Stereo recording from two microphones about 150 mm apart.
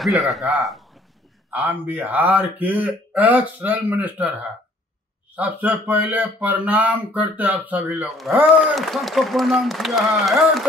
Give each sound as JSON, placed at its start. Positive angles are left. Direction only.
{"t": 0.0, "sound": "speech", "side_deg": 0}
{"t": 1.5, "sound": "speech", "side_deg": -10}